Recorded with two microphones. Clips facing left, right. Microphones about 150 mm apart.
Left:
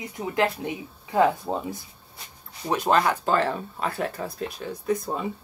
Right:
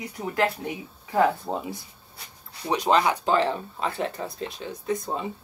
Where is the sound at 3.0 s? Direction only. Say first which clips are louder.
Right 1 dB; 15° right (ahead or behind).